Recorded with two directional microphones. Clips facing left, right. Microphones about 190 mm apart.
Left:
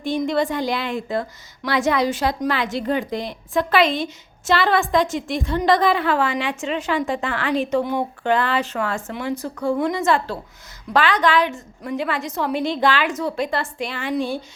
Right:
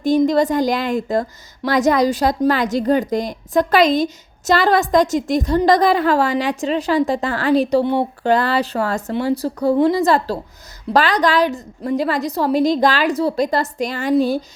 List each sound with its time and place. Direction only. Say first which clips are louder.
0.0 s a woman's voice: right 6 dB; 40° right (ahead or behind)